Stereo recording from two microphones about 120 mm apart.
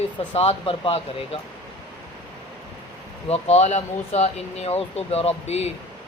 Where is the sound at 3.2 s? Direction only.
60° left (ahead or behind).